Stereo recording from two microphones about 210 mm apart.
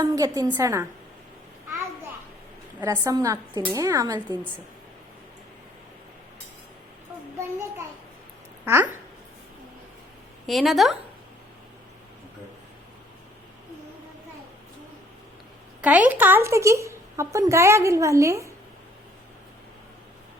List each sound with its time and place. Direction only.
0.0 s a woman's voice: 15° right (ahead or behind)
2.8 s a woman's voice: 15° right (ahead or behind)
8.6 s a woman's voice: 10° right (ahead or behind)
10.4 s a woman's voice: centre (ahead or behind)
15.8 s a woman's voice: 5° right (ahead or behind)